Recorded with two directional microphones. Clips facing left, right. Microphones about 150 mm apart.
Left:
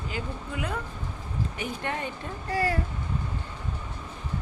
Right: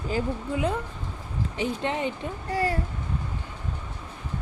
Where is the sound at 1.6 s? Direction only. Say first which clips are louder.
Right 7 dB; 20° right (ahead or behind).